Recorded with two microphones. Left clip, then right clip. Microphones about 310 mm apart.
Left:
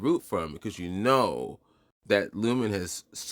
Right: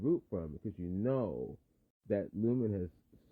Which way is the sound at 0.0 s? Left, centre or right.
Centre.